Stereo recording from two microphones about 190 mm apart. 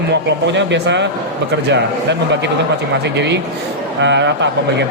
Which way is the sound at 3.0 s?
65° right (ahead or behind).